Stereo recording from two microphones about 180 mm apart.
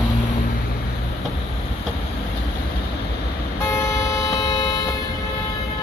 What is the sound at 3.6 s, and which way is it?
Vehicle, 15° left (ahead or behind).